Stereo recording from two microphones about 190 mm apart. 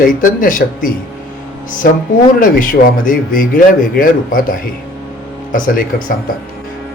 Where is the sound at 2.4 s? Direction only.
45° left (ahead or behind).